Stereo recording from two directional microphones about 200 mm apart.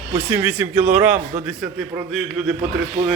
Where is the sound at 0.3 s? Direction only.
10° right (ahead or behind).